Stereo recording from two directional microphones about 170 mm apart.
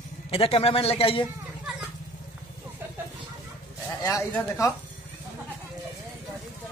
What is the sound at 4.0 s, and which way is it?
Speech, 20° left (ahead or behind).